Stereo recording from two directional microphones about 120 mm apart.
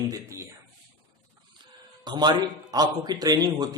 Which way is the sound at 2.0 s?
35° right (ahead or behind).